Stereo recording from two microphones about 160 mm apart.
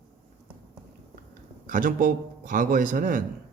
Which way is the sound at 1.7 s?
55° right (ahead or behind).